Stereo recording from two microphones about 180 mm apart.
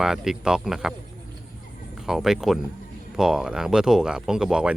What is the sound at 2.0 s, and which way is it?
Speech, centre (ahead or behind).